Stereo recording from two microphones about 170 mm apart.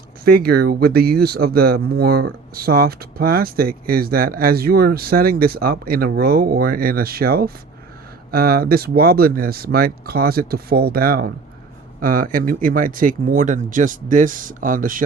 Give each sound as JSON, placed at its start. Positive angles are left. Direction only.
{"t": 0.3, "sound": "speech", "side_deg": -65}